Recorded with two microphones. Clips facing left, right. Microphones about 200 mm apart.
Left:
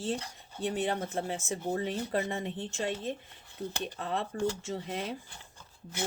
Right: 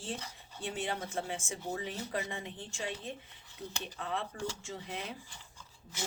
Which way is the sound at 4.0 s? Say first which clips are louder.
Left 5 dB; 40° left (ahead or behind).